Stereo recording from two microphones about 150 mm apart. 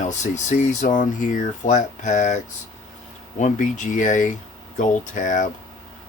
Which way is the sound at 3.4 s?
60° left (ahead or behind).